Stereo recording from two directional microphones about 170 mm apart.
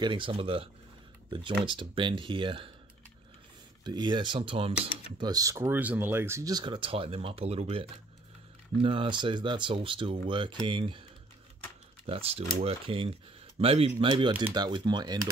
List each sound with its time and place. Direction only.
0.0 s speech: 30° right (ahead or behind)
1.7 s speech: 30° right (ahead or behind)
3.8 s speech: 25° right (ahead or behind)
5.2 s speech: 20° right (ahead or behind)
12.1 s speech: 35° right (ahead or behind)